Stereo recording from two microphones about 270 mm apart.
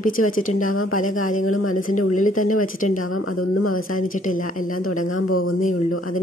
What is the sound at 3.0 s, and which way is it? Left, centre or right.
Speech, left.